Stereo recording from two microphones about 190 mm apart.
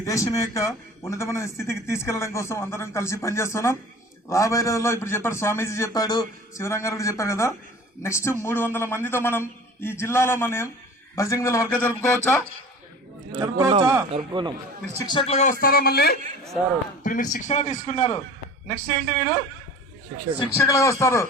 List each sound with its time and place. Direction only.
0.0 s a man's voice: 15° left (ahead or behind)
13.3 s a man's voice: 25° right (ahead or behind)
15.0 s a man's voice: 25° left (ahead or behind)
15.6 s a man's voice: 50° left (ahead or behind); by 18.2 s 35° left (ahead or behind)
20.6 s a man's voice: 15° left (ahead or behind)